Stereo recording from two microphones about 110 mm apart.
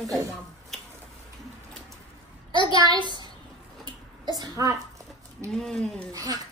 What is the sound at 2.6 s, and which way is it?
Speech, 40° right (ahead or behind).